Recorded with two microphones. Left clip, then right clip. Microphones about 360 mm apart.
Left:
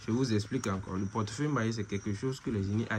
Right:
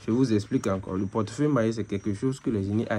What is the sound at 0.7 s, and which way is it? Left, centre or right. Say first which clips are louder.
Speech: right 7 dB; right.